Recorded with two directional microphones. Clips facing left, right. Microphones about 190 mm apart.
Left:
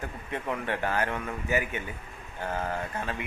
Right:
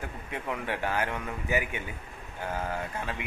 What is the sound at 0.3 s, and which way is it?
Speech, 10° right (ahead or behind).